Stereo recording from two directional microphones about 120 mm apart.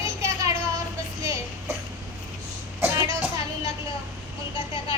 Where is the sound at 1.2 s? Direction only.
25° right (ahead or behind).